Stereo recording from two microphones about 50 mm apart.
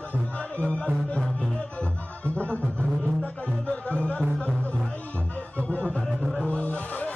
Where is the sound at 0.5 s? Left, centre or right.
Left.